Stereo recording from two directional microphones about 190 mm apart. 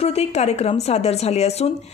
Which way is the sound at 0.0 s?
35° left (ahead or behind).